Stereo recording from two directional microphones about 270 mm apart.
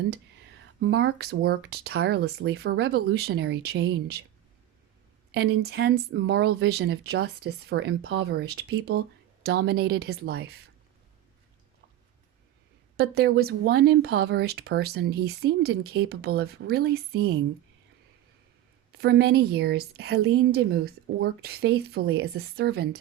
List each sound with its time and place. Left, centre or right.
0.8 s speech: right
5.3 s speech: right
13.0 s speech: right
18.9 s speech: right